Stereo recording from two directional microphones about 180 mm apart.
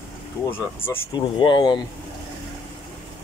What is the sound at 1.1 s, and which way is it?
Speech, 25° left (ahead or behind).